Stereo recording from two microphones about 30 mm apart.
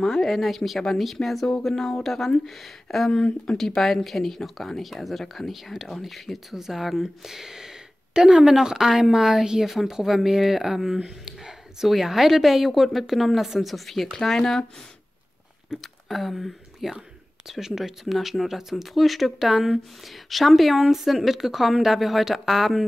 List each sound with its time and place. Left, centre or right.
0.0 s speech: centre
1.7 s speech: centre
2.0 s speech: centre
3.1 s speech: left
3.5 s a woman's voice: centre
5.9 s speech: centre
6.5 s a woman's voice: centre
8.1 s a woman's voice: right; by 11.0 s centre
11.1 s a sound: centre
11.9 s a woman's voice: centre
15.8 s speech: centre
17.5 s a woman's voice: centre